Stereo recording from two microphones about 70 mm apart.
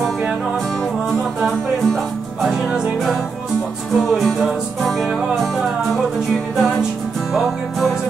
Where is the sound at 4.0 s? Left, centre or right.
Centre.